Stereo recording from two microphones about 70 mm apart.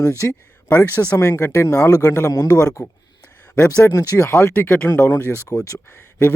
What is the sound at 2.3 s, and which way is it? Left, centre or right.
Speech, left.